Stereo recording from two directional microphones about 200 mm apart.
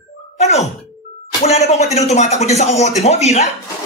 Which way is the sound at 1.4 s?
35° left (ahead or behind).